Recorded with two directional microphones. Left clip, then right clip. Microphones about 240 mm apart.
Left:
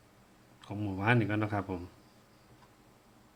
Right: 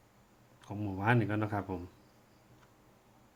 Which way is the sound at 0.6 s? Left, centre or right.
Centre.